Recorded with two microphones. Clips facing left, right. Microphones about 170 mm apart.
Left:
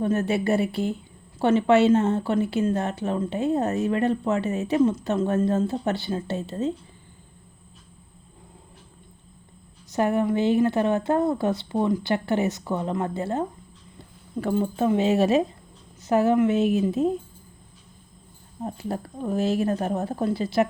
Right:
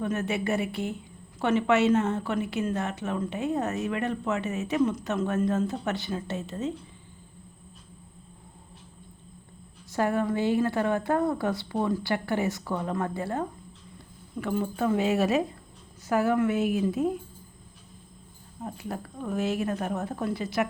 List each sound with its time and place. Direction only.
0.0 s speech: 35° left (ahead or behind)
9.9 s a woman's voice: 20° left (ahead or behind)
14.3 s a woman's voice: 35° left (ahead or behind)
18.6 s speech: 35° left (ahead or behind)